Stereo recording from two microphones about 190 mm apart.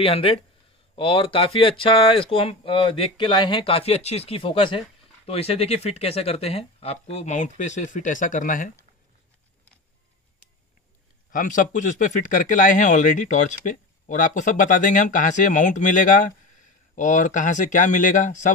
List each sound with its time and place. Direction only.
0.0 s speech: 30° left (ahead or behind)
11.3 s speech: 40° left (ahead or behind)